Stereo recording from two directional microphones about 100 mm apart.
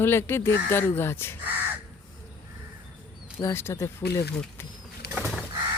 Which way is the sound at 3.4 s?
25° left (ahead or behind).